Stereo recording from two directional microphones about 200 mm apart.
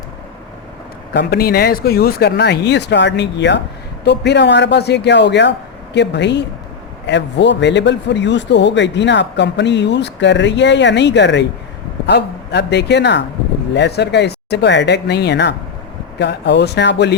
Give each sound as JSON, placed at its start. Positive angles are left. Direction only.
{"t": 1.1, "sound": "a man's voice", "side_deg": 55}